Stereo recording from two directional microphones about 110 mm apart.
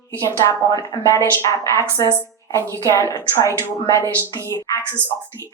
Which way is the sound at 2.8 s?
30° left (ahead or behind).